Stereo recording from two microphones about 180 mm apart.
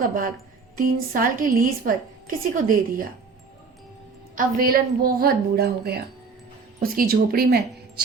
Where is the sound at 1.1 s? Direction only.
50° right (ahead or behind).